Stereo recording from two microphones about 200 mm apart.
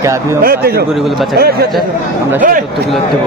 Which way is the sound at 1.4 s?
50° right (ahead or behind).